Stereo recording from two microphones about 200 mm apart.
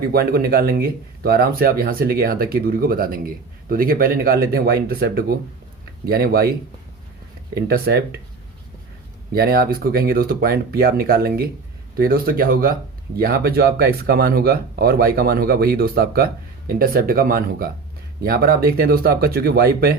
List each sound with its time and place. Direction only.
0.1 s speech: 50° right (ahead or behind)
7.5 s speech: 50° right (ahead or behind)
9.3 s speech: 50° right (ahead or behind)